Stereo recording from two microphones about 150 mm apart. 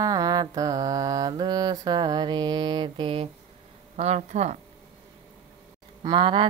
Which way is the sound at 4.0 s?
50° right (ahead or behind).